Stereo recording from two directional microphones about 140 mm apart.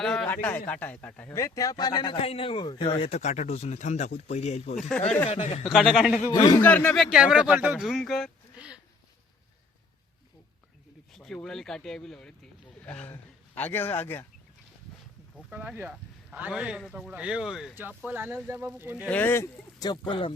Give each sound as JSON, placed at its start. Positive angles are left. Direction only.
{"t": 0.0, "sound": "a man's voice", "side_deg": 5}
{"t": 1.3, "sound": "speech", "side_deg": 25}
{"t": 5.6, "sound": "speech", "side_deg": 0}
{"t": 6.3, "sound": "a man's voice", "side_deg": 30}
{"t": 6.6, "sound": "speech", "side_deg": 15}
{"t": 8.5, "sound": "a sound", "side_deg": -10}
{"t": 11.1, "sound": "a man's voice", "side_deg": 5}
{"t": 15.4, "sound": "speech", "side_deg": -10}
{"t": 17.7, "sound": "speech", "side_deg": -15}
{"t": 19.0, "sound": "a man's voice", "side_deg": 10}
{"t": 19.8, "sound": "speech", "side_deg": 35}